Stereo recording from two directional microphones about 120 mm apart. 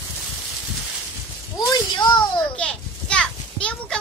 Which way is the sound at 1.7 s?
35° left (ahead or behind).